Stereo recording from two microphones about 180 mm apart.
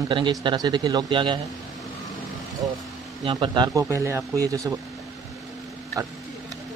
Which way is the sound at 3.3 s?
25° right (ahead or behind).